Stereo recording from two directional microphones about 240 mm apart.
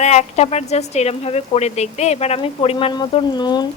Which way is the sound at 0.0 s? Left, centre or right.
Left.